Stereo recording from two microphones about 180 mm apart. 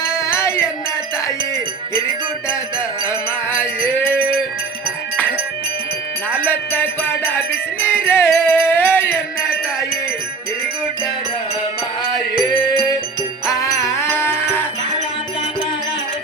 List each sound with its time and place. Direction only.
0.0 s music: 15° left (ahead or behind)
3.1 s music: 15° left (ahead or behind)
6.4 s music: 10° left (ahead or behind)
13.6 s music: 15° left (ahead or behind)